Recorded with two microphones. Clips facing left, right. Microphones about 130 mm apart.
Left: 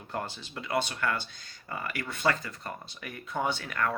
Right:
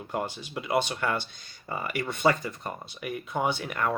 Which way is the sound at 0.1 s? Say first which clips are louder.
Right 4 dB; 15° right (ahead or behind).